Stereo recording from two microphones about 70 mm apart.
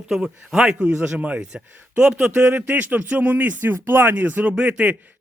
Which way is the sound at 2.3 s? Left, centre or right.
Right.